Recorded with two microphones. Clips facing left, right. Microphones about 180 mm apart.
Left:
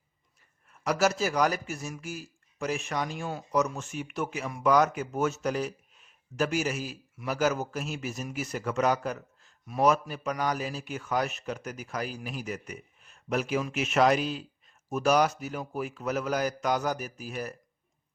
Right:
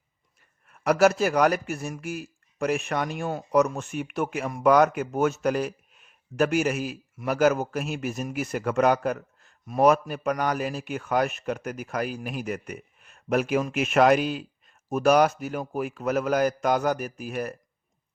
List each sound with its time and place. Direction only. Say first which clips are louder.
0.7 s a man's voice: right 6 dB; 60° right (ahead or behind)